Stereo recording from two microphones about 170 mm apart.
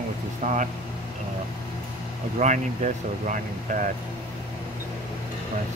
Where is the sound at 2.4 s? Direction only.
45° right (ahead or behind).